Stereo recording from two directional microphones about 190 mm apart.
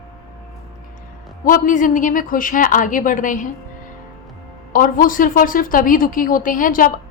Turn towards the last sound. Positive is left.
turn(degrees=45)  # may be behind; listen again after turning